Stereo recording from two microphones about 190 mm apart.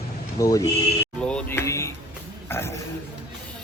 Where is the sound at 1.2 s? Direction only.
5° left (ahead or behind).